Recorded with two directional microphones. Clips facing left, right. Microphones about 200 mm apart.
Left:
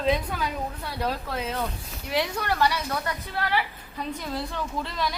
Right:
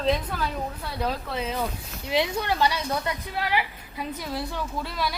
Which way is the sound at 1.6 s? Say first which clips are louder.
Right 1 dB; 20° right (ahead or behind).